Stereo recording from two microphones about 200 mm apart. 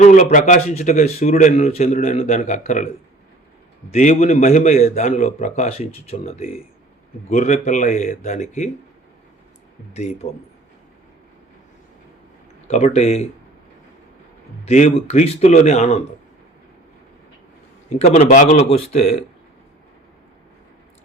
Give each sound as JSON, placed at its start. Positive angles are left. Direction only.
{"t": 0.0, "sound": "a man's voice", "side_deg": 40}
{"t": 9.9, "sound": "a man's voice", "side_deg": 35}
{"t": 12.6, "sound": "a man's voice", "side_deg": 35}
{"t": 14.6, "sound": "a man's voice", "side_deg": 35}
{"t": 17.8, "sound": "a man's voice", "side_deg": 40}